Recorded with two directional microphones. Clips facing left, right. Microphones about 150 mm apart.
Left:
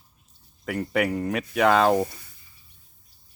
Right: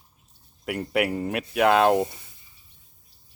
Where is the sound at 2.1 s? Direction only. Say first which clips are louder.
Even; 20° right (ahead or behind).